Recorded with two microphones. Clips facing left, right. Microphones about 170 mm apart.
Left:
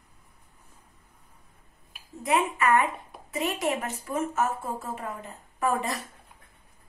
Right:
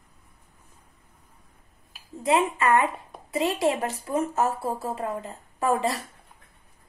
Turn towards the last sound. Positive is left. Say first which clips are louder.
# right 3 dB
turn(degrees=-30)  # may be behind; listen again after turning